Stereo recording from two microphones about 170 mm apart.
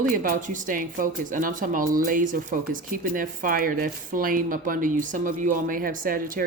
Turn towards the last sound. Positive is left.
turn(degrees=-55)  # may be behind; listen again after turning